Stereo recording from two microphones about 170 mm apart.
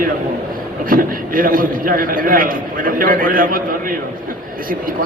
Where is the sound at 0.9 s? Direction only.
55° right (ahead or behind).